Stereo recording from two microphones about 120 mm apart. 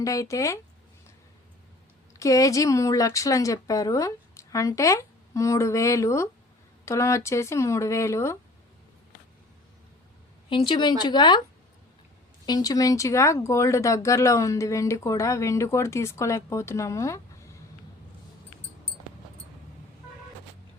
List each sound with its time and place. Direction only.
0.0 s speech: 25° left (ahead or behind)
2.1 s speech: 25° left (ahead or behind)
10.5 s speech: 40° left (ahead or behind)
12.5 s speech: 30° left (ahead or behind)